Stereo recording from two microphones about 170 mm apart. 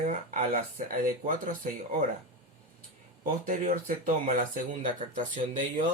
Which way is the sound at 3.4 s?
50° right (ahead or behind).